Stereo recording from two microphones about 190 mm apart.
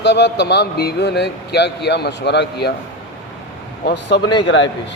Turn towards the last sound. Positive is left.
turn(degrees=70)  # may be behind; listen again after turning